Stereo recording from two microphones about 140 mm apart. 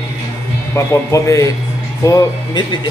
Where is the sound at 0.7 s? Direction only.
20° left (ahead or behind).